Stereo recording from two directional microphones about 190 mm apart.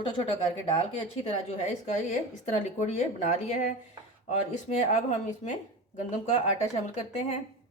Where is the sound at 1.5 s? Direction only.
35° left (ahead or behind).